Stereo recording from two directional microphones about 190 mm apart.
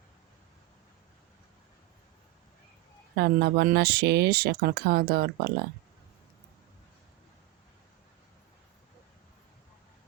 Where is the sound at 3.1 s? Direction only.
60° right (ahead or behind).